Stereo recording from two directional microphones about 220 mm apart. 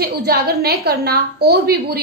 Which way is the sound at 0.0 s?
45° right (ahead or behind).